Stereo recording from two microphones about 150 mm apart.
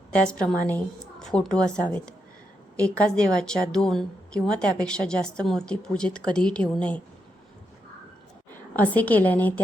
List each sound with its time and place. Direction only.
0.1 s a woman's voice: 5° left (ahead or behind)
8.7 s a woman's voice: 10° left (ahead or behind)